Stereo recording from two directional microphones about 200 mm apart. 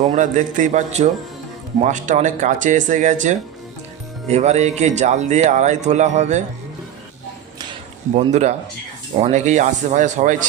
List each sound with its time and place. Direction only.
0.0 s speech: 35° right (ahead or behind)
8.1 s speech: 35° right (ahead or behind)